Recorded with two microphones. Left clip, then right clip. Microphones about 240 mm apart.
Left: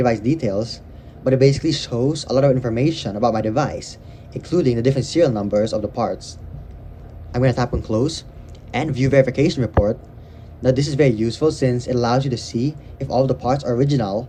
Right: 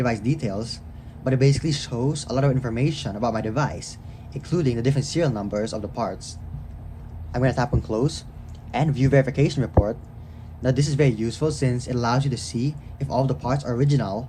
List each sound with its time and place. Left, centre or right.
0.0 s speech: centre
7.3 s speech: left